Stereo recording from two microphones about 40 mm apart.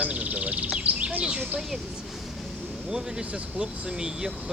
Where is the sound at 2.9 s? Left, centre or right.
Centre.